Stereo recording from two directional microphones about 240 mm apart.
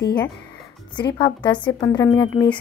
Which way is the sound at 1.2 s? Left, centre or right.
Centre.